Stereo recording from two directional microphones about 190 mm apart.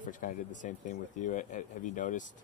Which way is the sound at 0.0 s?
45° left (ahead or behind).